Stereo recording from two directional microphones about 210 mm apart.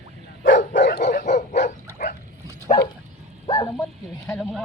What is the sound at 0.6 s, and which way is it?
Dog, 40° left (ahead or behind).